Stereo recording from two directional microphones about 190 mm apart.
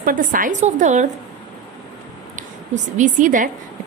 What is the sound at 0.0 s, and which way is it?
A woman's voice, 45° right (ahead or behind).